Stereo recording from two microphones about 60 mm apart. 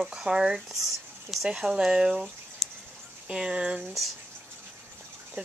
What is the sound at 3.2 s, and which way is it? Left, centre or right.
Speech, centre.